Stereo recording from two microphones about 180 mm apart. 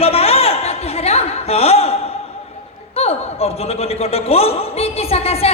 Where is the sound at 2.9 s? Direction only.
35° left (ahead or behind).